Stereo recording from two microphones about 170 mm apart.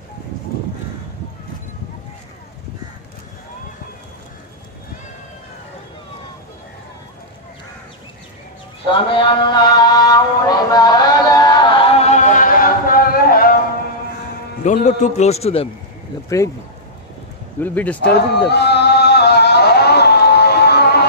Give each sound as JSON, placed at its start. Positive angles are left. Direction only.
{"t": 8.9, "sound": "a sound", "side_deg": 30}
{"t": 14.6, "sound": "a man's voice", "side_deg": 45}
{"t": 16.3, "sound": "speech", "side_deg": 20}
{"t": 17.6, "sound": "speech", "side_deg": 10}
{"t": 18.5, "sound": "music", "side_deg": 75}